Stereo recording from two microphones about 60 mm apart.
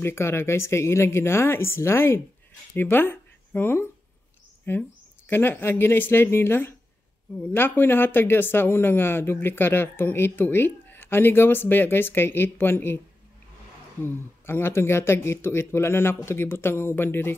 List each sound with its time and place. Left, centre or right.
0.0 s speech: left
14.0 s speech: left